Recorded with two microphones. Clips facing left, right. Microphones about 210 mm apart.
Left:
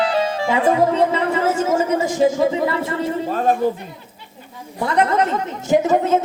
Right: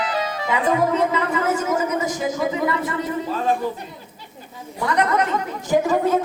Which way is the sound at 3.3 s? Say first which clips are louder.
Left 5 dB; 45° left (ahead or behind).